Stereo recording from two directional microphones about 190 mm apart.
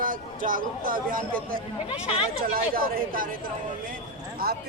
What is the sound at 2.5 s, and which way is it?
Speech, 50° right (ahead or behind).